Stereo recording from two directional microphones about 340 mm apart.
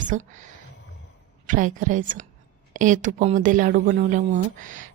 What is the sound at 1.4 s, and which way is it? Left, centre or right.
Speech, right.